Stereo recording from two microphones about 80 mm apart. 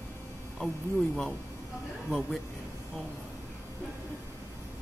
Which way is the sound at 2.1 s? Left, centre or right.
Centre.